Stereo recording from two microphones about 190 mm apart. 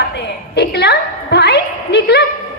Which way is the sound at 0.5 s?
60° left (ahead or behind).